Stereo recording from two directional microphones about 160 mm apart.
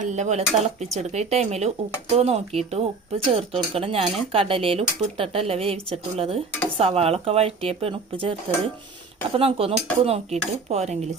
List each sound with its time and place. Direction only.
0.0 s speech: 45° right (ahead or behind)